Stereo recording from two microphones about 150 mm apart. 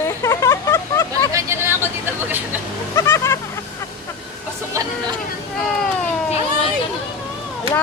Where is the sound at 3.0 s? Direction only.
20° left (ahead or behind).